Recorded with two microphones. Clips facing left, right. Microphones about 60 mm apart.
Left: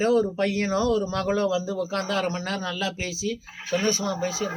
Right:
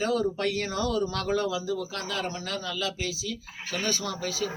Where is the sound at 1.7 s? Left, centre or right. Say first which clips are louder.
Left 6 dB; left.